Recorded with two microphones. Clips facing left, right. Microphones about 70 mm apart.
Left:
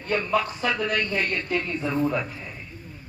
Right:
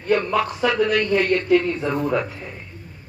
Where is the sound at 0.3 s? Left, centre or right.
Right.